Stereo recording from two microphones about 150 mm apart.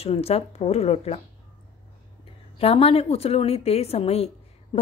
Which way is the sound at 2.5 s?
40° left (ahead or behind).